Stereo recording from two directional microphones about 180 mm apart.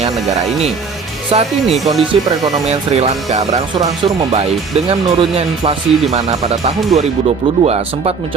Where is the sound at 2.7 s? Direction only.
35° right (ahead or behind).